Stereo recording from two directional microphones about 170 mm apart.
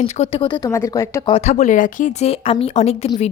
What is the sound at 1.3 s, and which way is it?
A woman's voice, 40° left (ahead or behind).